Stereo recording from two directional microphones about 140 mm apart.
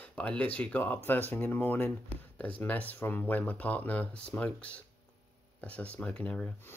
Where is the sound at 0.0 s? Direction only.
10° left (ahead or behind).